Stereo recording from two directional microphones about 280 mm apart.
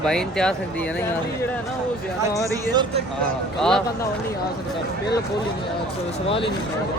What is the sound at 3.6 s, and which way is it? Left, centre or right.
Speech, centre.